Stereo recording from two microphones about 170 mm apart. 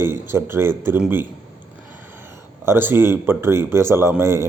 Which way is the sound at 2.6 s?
15° right (ahead or behind).